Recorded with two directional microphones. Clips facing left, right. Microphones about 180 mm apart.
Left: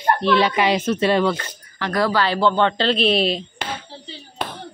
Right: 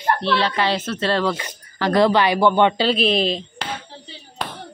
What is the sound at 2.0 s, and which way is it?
Speech, 20° right (ahead or behind).